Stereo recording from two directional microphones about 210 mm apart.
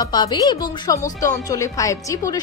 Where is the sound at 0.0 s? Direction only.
20° left (ahead or behind).